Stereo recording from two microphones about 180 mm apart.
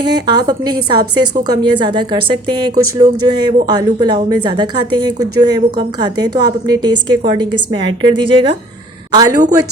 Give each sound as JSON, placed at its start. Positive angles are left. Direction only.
{"t": 0.0, "sound": "a woman's voice", "side_deg": -25}